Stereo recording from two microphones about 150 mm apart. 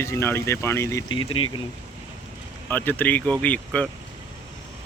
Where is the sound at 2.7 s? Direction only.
10° left (ahead or behind).